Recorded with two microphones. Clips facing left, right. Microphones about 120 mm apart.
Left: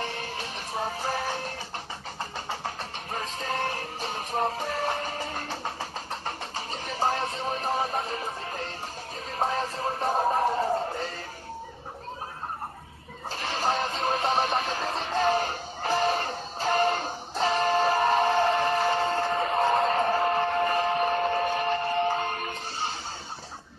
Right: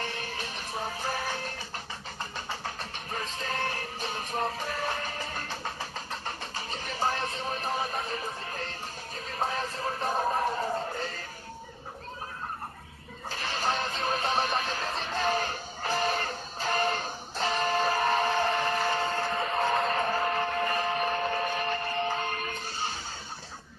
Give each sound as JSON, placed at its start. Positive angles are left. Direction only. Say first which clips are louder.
{"t": 4.4, "sound": "music", "louder": "left 4 dB", "side_deg": 30}
{"t": 9.4, "sound": "music", "louder": "left 4 dB", "side_deg": 30}
{"t": 13.3, "sound": "music", "louder": "left 3 dB", "side_deg": 30}